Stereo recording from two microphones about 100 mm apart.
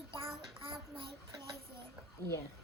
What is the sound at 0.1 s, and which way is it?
Child singing, 65° right (ahead or behind).